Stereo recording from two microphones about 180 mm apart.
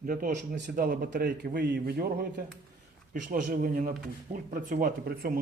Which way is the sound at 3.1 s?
45° right (ahead or behind).